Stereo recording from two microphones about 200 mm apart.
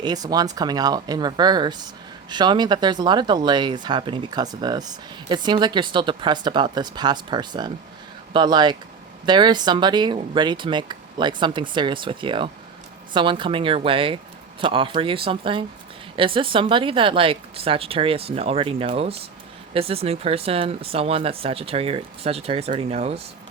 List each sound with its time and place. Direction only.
0.0 s speech: 20° right (ahead or behind)